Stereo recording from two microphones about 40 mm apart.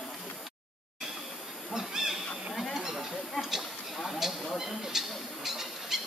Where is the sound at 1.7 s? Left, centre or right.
Centre.